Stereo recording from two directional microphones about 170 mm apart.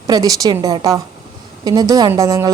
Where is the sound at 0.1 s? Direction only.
20° right (ahead or behind).